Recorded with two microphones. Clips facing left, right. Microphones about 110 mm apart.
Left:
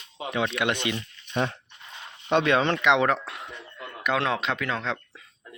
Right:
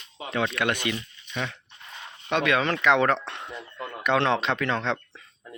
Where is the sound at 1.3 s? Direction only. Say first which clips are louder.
Left 5 dB; 40° left (ahead or behind).